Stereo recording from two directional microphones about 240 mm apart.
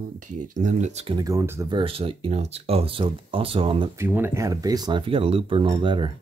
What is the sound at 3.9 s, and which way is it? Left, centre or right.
Speech, centre.